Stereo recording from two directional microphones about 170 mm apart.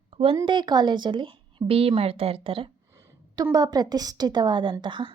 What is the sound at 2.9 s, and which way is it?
A woman's voice, 20° right (ahead or behind).